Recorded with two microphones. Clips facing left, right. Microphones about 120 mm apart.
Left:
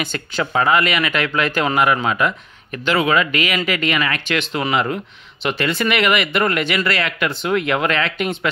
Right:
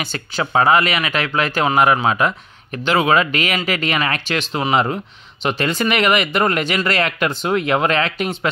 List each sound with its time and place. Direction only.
0.4 s speech: 25° right (ahead or behind)